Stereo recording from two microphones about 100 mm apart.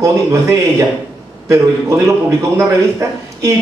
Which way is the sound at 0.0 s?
30° right (ahead or behind).